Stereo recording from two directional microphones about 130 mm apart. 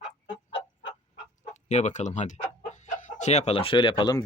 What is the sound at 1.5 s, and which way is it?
Speech, 65° left (ahead or behind).